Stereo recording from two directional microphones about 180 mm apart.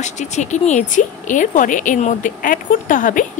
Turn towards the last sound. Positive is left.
turn(degrees=50)  # may be behind; listen again after turning